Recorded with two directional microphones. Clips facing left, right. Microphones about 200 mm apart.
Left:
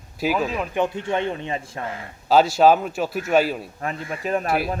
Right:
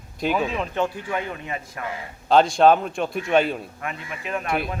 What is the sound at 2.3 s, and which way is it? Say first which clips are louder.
Speech: even; 5° left (ahead or behind).